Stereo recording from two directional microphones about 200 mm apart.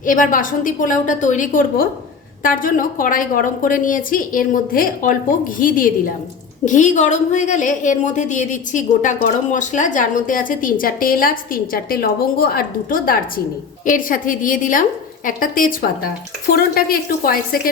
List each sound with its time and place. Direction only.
0.0 s a woman's voice: 40° left (ahead or behind)